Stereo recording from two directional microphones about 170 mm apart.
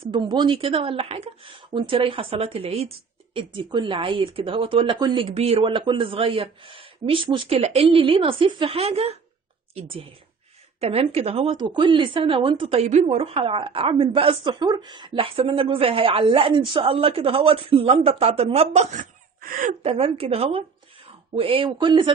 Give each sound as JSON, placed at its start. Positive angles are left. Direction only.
{"t": 0.1, "sound": "a woman's voice", "side_deg": -25}
{"t": 19.8, "sound": "a woman's voice", "side_deg": -35}